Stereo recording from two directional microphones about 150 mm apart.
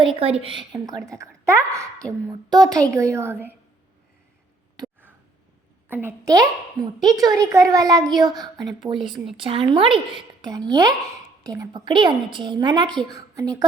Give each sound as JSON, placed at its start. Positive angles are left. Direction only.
{"t": 0.0, "sound": "a woman's voice", "side_deg": -40}
{"t": 5.9, "sound": "a child's voice", "side_deg": -15}
{"t": 9.0, "sound": "speech", "side_deg": 0}
{"t": 9.4, "sound": "a woman's voice", "side_deg": -35}